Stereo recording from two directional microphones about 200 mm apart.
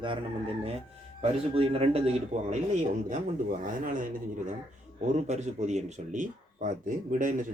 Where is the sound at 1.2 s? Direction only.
30° right (ahead or behind).